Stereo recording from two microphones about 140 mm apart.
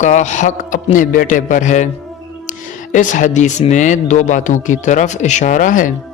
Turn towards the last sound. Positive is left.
turn(degrees=70)  # may be behind; listen again after turning